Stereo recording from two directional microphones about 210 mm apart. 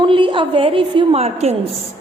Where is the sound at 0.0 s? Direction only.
25° right (ahead or behind).